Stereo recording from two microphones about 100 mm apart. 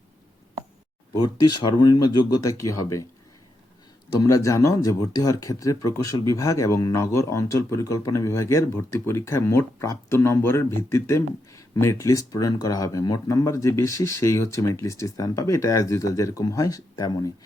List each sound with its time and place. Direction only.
1.1 s speech: 45° left (ahead or behind)
4.2 s speech: 35° left (ahead or behind)